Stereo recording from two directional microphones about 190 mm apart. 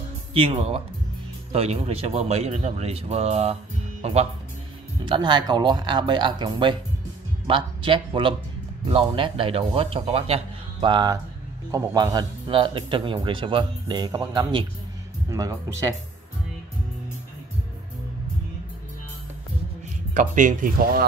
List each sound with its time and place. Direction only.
0.3 s speech: 30° right (ahead or behind)
5.0 s speech: 25° right (ahead or behind)
20.2 s speech: 40° right (ahead or behind)